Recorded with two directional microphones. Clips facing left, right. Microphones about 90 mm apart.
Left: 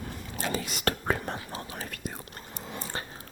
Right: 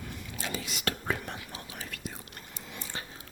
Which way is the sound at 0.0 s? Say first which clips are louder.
Left 4 dB; 40° left (ahead or behind).